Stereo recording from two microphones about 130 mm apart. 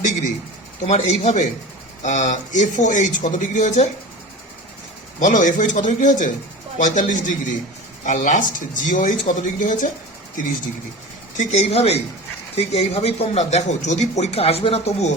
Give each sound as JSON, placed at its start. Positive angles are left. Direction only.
{"t": 0.9, "sound": "speech", "side_deg": 60}
{"t": 5.2, "sound": "speech", "side_deg": 75}
{"t": 11.3, "sound": "speech", "side_deg": 60}